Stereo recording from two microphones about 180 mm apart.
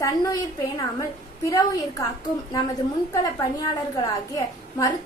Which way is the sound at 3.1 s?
20° left (ahead or behind).